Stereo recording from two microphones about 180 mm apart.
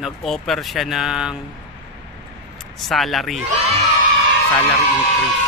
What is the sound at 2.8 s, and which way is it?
Speech, centre (ahead or behind).